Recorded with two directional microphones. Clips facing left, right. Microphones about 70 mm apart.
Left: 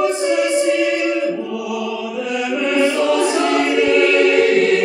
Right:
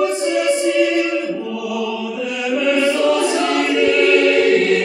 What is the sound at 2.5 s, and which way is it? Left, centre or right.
Chant, left.